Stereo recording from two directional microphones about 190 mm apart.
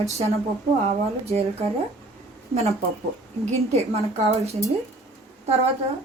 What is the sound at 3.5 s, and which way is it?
Speech, 35° right (ahead or behind).